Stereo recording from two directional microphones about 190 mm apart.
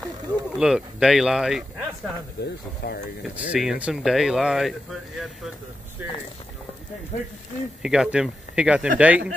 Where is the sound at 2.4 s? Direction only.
60° left (ahead or behind).